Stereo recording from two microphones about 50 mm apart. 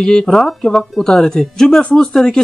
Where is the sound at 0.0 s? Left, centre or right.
Centre.